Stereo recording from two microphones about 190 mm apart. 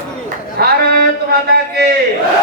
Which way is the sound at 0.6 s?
55° right (ahead or behind).